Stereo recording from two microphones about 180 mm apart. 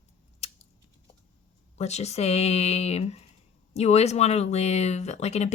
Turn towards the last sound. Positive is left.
turn(degrees=40)  # may be behind; listen again after turning